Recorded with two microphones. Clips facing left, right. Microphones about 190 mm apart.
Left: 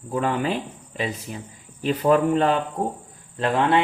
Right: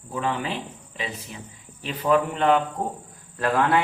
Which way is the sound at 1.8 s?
40° left (ahead or behind).